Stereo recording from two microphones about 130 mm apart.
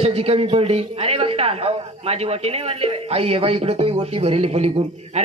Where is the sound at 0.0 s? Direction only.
50° right (ahead or behind).